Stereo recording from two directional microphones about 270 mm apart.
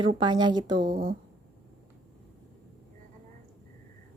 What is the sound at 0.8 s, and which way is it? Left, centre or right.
Speech, right.